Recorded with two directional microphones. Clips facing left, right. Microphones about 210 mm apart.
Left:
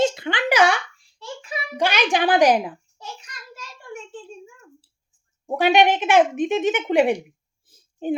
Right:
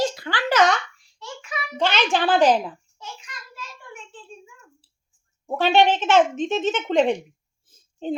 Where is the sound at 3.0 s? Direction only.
40° left (ahead or behind).